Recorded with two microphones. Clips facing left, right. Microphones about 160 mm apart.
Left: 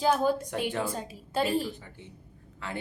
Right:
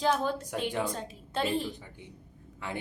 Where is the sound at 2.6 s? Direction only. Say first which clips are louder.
Even; 15° right (ahead or behind).